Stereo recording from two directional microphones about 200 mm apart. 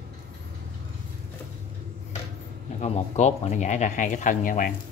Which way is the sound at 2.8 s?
35° left (ahead or behind).